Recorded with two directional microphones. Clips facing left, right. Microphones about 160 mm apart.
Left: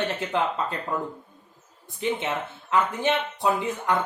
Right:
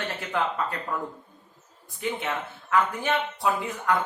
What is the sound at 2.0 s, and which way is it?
Speech, 20° left (ahead or behind).